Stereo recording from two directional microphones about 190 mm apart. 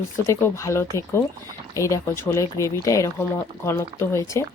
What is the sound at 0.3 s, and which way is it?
Speech, 15° left (ahead or behind).